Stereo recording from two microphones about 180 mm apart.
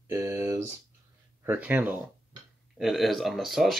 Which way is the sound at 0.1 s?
20° right (ahead or behind).